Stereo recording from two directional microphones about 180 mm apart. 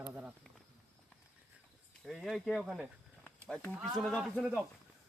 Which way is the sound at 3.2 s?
5° left (ahead or behind).